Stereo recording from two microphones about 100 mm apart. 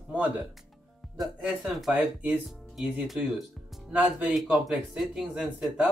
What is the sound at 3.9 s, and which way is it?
Speech, 15° right (ahead or behind).